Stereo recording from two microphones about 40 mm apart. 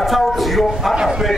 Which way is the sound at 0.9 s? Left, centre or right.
Centre.